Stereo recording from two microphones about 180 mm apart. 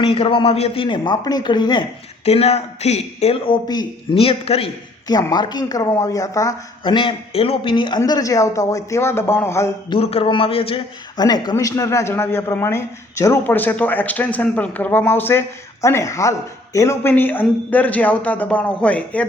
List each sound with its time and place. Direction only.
0.0 s speech: 30° left (ahead or behind)
2.2 s a man's voice: 35° left (ahead or behind)
5.0 s speech: 20° left (ahead or behind)
9.9 s a man's voice: 35° left (ahead or behind); by 19.2 s 5° left (ahead or behind)